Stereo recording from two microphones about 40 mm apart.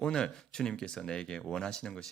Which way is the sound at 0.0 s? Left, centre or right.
Centre.